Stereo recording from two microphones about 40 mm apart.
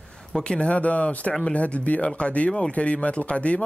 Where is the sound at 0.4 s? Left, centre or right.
Left.